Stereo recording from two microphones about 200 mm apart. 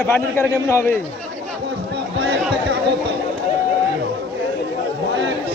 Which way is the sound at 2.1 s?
55° right (ahead or behind).